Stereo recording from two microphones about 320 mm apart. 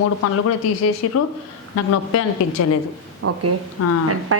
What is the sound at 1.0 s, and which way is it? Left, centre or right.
A man's voice, left.